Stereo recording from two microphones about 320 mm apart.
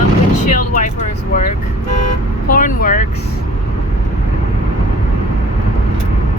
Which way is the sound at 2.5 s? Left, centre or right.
Left.